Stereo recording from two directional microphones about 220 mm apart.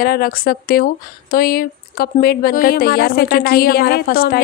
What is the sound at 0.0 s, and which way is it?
A woman's voice, 45° left (ahead or behind).